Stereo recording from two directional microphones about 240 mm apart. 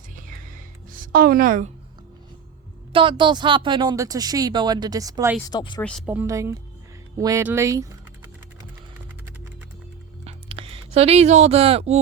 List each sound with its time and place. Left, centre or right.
0.2 s music: right
2.9 s a woman's voice: right
5.5 s speech: centre
6.1 s a woman's voice: centre
10.2 s a sound: right